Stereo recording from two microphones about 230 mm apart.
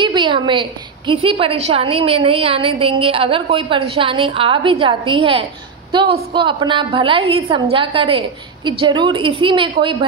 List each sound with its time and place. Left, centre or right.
0.0 s a woman's voice: right